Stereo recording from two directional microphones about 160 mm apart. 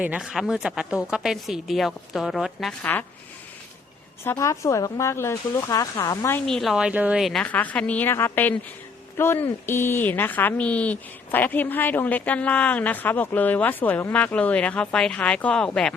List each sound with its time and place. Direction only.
0.0 s speech: 5° right (ahead or behind)
4.2 s speech: 15° left (ahead or behind)
6.4 s a woman's voice: centre (ahead or behind)